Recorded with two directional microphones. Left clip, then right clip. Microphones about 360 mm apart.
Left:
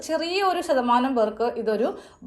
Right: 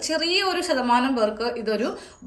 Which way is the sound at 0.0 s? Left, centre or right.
Centre.